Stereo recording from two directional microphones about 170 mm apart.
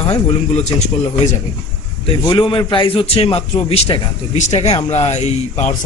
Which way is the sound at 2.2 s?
25° left (ahead or behind).